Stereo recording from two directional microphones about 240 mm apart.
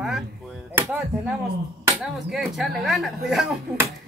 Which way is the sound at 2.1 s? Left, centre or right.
Centre.